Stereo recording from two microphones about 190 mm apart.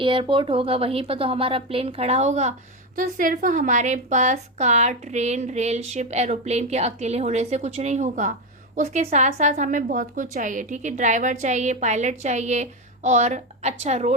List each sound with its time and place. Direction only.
0.0 s speech: 25° right (ahead or behind)